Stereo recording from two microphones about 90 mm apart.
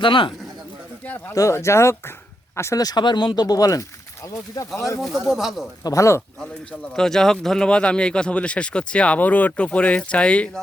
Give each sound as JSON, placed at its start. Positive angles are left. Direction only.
{"t": 0.0, "sound": "a man's voice", "side_deg": 65}
{"t": 1.3, "sound": "speech", "side_deg": 35}
{"t": 2.7, "sound": "speech", "side_deg": 50}
{"t": 5.2, "sound": "speech", "side_deg": 0}
{"t": 5.8, "sound": "speech", "side_deg": 35}
{"t": 6.4, "sound": "a man's voice", "side_deg": 5}